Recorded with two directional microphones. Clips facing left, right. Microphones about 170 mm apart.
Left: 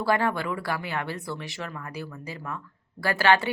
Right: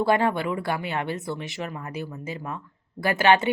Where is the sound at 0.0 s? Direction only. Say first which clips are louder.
Right 3 dB; 20° right (ahead or behind).